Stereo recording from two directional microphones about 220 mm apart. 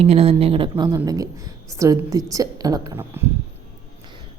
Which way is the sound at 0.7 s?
15° right (ahead or behind).